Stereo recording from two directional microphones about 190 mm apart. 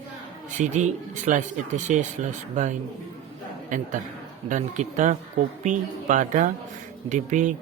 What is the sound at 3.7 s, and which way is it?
Speech, 45° right (ahead or behind).